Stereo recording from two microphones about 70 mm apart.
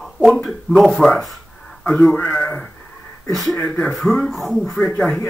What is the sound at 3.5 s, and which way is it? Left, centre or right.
Speech, centre.